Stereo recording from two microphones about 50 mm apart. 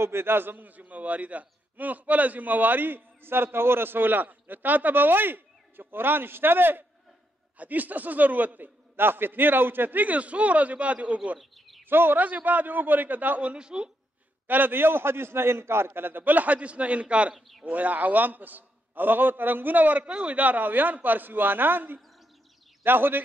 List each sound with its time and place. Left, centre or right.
0.0 s a man's voice: right
7.5 s a man's voice: right
11.3 s bird: centre
11.8 s a man's voice: right
13.5 s speech: centre
14.5 s a man's voice: right